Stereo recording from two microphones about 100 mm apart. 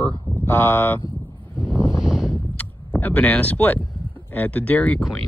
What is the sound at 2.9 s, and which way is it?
Speech, 15° left (ahead or behind).